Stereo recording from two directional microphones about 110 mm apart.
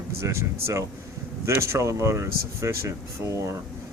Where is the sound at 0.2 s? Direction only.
25° right (ahead or behind).